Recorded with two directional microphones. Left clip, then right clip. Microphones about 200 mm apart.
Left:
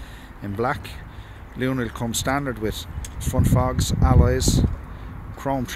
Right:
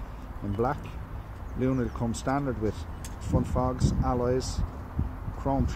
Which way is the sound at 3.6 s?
35° left (ahead or behind).